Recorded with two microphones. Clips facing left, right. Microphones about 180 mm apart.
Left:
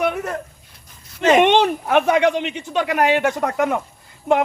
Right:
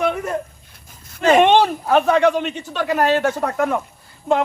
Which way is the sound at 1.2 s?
20° left (ahead or behind).